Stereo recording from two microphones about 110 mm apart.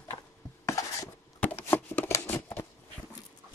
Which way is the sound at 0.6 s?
30° left (ahead or behind).